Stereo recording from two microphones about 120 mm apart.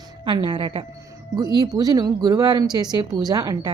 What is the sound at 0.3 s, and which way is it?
A woman's voice, 40° right (ahead or behind).